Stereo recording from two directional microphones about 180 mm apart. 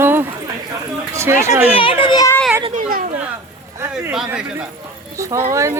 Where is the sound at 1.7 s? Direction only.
30° left (ahead or behind).